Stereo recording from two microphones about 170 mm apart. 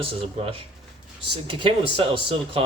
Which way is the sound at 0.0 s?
35° right (ahead or behind).